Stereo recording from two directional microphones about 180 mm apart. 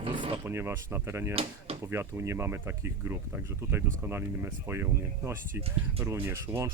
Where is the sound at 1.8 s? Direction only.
15° right (ahead or behind).